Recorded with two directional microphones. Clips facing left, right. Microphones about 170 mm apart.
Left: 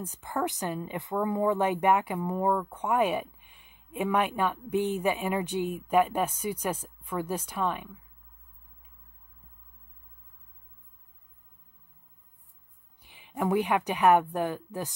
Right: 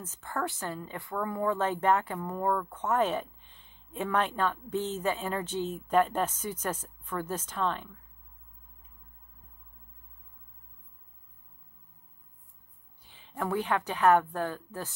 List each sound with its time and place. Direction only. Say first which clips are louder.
0.0 s speech: left 3 dB; 15° left (ahead or behind)
13.0 s a woman's voice: left 4 dB; 15° left (ahead or behind)